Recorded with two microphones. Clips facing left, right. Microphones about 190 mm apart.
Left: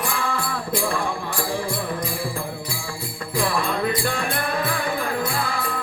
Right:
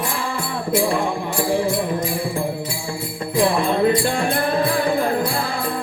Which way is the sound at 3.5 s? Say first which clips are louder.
Right 6 dB; 25° right (ahead or behind).